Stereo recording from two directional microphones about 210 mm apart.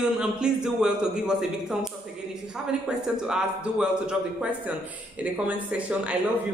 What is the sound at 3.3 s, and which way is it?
A man's voice, 5° right (ahead or behind).